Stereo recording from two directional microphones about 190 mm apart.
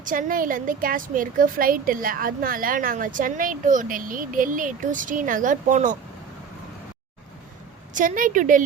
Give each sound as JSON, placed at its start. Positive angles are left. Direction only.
{"t": 0.0, "sound": "a woman's voice", "side_deg": -45}
{"t": 7.9, "sound": "a woman's voice", "side_deg": -45}